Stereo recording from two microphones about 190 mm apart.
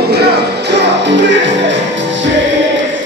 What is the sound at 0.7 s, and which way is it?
Music, 70° right (ahead or behind).